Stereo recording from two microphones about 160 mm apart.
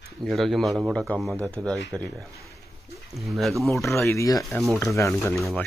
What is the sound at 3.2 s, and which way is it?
Speech, centre (ahead or behind).